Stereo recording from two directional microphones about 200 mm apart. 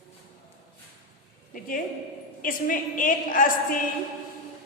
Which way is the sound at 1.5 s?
45° left (ahead or behind).